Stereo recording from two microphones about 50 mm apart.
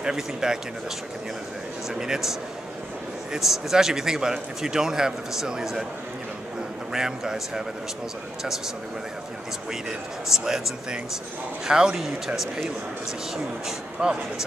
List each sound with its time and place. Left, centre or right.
0.0 s a man's voice: centre
2.0 s a man's voice: centre
3.3 s a man's voice: centre
6.9 s a man's voice: centre
9.7 s a man's voice: centre
13.7 s a man's voice: centre